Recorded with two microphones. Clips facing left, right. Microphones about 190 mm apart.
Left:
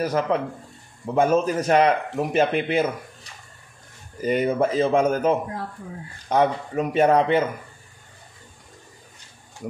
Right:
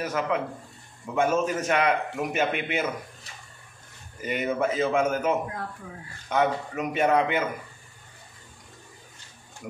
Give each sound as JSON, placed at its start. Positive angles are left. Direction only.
{"t": 0.0, "sound": "speech", "side_deg": 35}
{"t": 4.2, "sound": "speech", "side_deg": 35}